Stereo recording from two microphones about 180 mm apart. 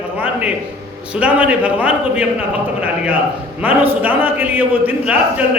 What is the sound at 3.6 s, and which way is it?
A man's voice, 10° right (ahead or behind).